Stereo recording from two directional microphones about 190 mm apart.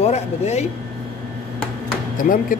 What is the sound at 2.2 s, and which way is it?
Speech, 45° left (ahead or behind).